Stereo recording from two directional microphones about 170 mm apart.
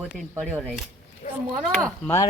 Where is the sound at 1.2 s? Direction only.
50° left (ahead or behind).